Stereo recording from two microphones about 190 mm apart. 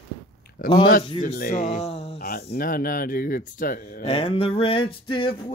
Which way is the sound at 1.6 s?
30° left (ahead or behind).